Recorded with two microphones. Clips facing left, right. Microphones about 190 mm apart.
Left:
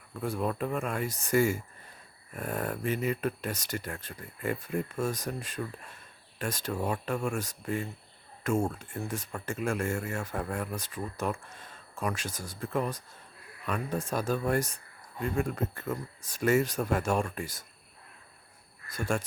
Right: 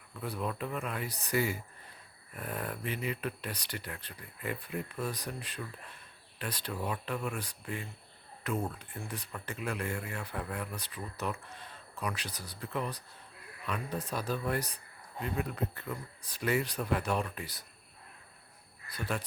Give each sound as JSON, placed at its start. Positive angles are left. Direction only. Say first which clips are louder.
{"t": 0.1, "sound": "speech", "louder": "left 5 dB", "side_deg": 45}
{"t": 18.9, "sound": "speech", "louder": "left 5 dB", "side_deg": 45}